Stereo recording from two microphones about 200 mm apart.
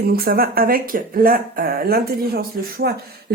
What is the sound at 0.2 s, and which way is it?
Speech, 50° right (ahead or behind).